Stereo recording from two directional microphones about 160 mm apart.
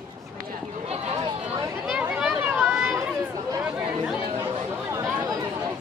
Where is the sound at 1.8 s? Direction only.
5° right (ahead or behind).